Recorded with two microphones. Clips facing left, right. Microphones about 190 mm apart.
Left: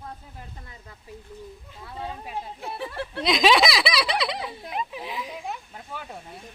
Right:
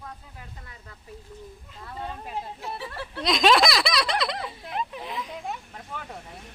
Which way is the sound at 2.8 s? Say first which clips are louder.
Left 4 dB; 55° left (ahead or behind).